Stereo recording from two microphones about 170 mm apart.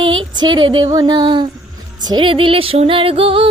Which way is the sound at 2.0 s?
25° right (ahead or behind).